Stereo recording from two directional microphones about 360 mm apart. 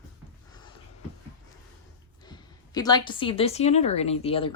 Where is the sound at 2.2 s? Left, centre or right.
Centre.